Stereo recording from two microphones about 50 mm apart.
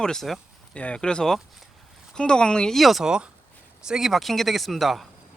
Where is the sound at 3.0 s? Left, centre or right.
Centre.